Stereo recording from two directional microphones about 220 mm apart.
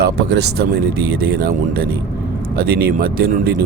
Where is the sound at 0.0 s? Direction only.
45° right (ahead or behind).